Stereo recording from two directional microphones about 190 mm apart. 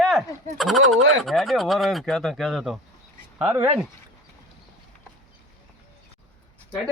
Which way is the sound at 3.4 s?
15° right (ahead or behind).